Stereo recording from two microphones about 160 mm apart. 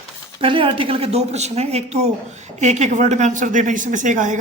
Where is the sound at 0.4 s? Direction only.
35° right (ahead or behind).